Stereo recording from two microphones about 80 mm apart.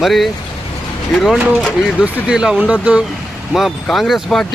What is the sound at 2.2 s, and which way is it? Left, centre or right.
Speech, centre.